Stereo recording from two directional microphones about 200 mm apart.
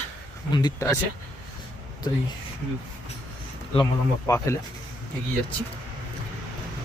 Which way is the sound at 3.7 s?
20° left (ahead or behind).